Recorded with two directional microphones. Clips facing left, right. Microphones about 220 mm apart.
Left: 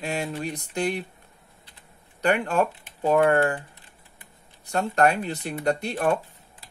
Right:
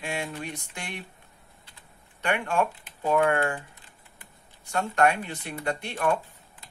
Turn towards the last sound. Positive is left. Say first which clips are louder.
# left 4 dB
turn(degrees=40)  # may be behind; listen again after turning